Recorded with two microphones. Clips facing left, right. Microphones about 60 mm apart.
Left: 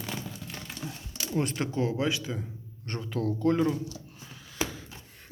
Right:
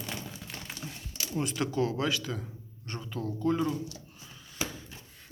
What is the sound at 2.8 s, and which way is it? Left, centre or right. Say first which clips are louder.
Speech: left 5 dB; left.